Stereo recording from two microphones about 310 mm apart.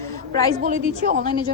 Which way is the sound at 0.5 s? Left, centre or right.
Right.